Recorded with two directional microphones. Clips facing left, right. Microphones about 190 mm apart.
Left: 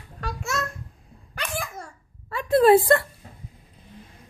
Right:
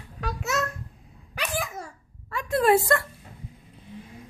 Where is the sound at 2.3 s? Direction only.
30° left (ahead or behind).